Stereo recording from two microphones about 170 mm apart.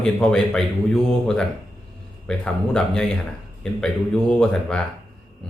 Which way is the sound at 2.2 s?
5° left (ahead or behind).